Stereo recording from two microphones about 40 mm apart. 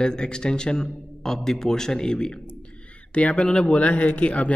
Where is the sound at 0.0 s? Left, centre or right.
Centre.